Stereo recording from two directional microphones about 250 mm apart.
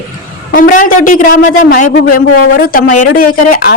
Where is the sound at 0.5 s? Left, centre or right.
Left.